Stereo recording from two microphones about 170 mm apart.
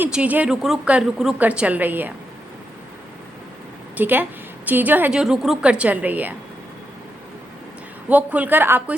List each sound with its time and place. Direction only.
0.0 s a woman's voice: 10° right (ahead or behind)
3.9 s a woman's voice: 10° right (ahead or behind)
8.1 s a woman's voice: 10° right (ahead or behind)